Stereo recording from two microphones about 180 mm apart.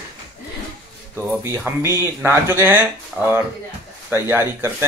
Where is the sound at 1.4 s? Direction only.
15° right (ahead or behind).